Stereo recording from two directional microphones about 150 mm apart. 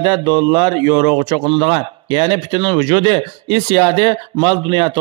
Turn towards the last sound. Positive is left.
turn(degrees=-35)  # may be behind; listen again after turning